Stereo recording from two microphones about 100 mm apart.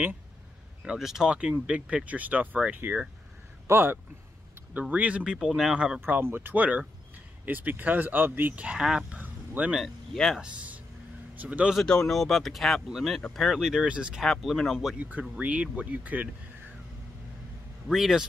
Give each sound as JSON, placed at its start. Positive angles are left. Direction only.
{"t": 0.8, "sound": "speech", "side_deg": -5}
{"t": 5.9, "sound": "speech", "side_deg": -20}
{"t": 9.1, "sound": "vehicle", "side_deg": -15}
{"t": 9.8, "sound": "speech", "side_deg": 0}
{"t": 10.4, "sound": "speech", "side_deg": -15}
{"t": 11.7, "sound": "speech", "side_deg": 5}
{"t": 14.2, "sound": "speech", "side_deg": 0}
{"t": 15.0, "sound": "speech", "side_deg": -15}
{"t": 17.8, "sound": "speech", "side_deg": -5}